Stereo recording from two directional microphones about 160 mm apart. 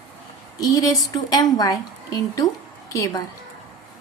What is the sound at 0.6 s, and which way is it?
A woman's voice, 20° left (ahead or behind).